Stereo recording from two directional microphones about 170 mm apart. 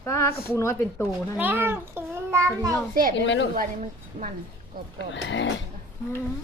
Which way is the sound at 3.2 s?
90° left.